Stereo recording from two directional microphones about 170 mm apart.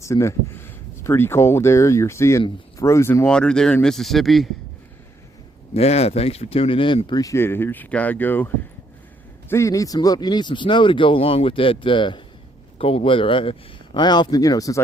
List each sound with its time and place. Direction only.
0.0 s speech: 15° left (ahead or behind); by 4.4 s centre (ahead or behind)
5.7 s speech: 40° left (ahead or behind); by 8.4 s 10° left (ahead or behind)
9.5 s speech: 15° left (ahead or behind)